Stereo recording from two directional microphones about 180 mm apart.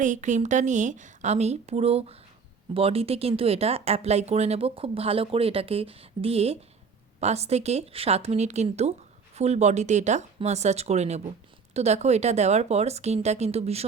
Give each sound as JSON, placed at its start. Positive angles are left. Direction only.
{"t": 0.0, "sound": "speech", "side_deg": -45}